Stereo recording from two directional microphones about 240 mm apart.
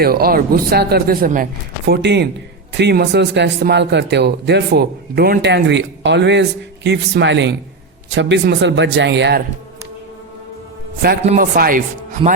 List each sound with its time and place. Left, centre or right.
0.0 s a man's voice: right
11.2 s speech: right
11.5 s speech: right